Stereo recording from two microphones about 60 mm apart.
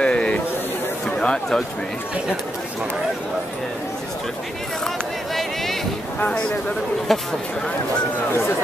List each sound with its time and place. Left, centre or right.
0.0 s a sound: centre
7.1 s speech: centre
8.3 s speech: left